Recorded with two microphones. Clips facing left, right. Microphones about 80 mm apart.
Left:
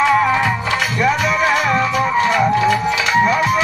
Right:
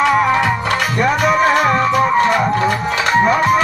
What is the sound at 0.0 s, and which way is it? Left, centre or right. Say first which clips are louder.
Music: right 1 dB; right.